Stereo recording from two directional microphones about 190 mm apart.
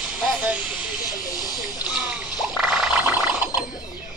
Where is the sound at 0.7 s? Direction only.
20° left (ahead or behind).